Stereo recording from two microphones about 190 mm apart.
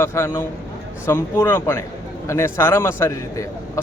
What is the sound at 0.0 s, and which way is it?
A man's voice, 15° left (ahead or behind).